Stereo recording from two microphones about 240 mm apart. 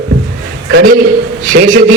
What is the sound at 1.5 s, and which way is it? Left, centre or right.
Speech, right.